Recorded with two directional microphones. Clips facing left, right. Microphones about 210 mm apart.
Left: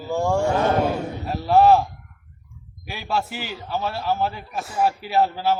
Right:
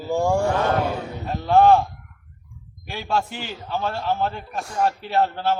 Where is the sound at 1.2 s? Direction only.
5° left (ahead or behind).